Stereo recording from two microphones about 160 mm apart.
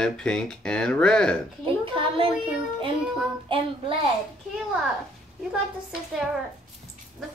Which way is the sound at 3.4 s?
35° right (ahead or behind).